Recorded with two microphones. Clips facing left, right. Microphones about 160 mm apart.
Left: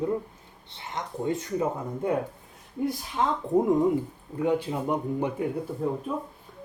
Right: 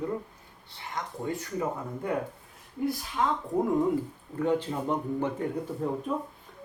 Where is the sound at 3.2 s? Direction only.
25° left (ahead or behind).